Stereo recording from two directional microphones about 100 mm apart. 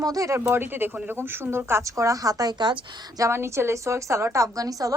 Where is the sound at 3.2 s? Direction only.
25° right (ahead or behind).